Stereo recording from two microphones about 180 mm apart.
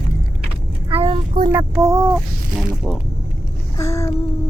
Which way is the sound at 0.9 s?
30° right (ahead or behind).